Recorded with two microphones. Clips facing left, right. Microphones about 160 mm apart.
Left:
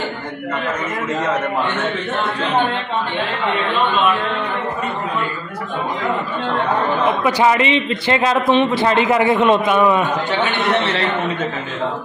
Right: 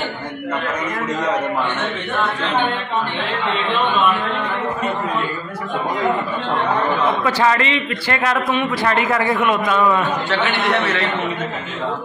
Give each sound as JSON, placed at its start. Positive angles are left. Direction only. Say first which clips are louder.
{"t": 7.2, "sound": "a man's voice", "louder": "left 5 dB", "side_deg": 15}